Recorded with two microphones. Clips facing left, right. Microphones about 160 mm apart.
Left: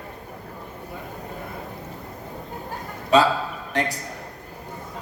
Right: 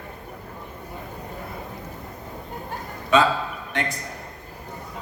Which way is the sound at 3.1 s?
35° left (ahead or behind).